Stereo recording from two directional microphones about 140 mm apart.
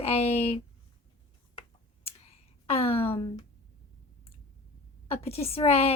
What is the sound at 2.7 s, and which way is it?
Speech, 45° left (ahead or behind).